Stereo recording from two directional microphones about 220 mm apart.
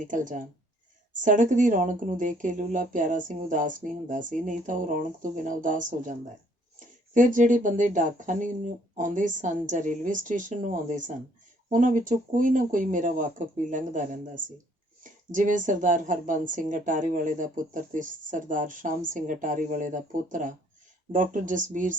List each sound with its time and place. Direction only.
0.0 s speech: 35° right (ahead or behind)